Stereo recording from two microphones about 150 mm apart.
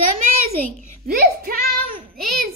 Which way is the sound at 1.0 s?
90° right.